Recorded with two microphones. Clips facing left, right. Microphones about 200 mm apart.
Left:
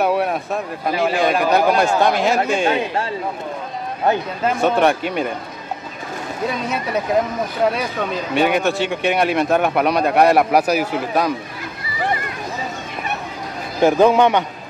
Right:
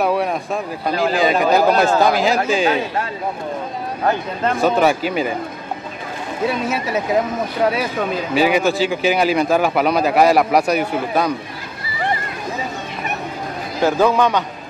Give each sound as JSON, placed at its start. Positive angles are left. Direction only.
{"t": 0.0, "sound": "speech", "side_deg": 0}
{"t": 4.5, "sound": "speech", "side_deg": 0}
{"t": 6.7, "sound": "speech", "side_deg": -5}
{"t": 13.8, "sound": "a man's voice", "side_deg": 20}